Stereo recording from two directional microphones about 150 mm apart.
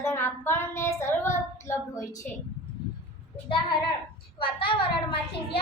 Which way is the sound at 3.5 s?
35° left (ahead or behind).